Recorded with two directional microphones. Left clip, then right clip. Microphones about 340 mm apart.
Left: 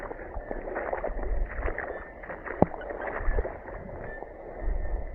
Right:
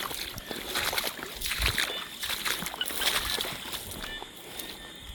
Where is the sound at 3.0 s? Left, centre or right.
Right.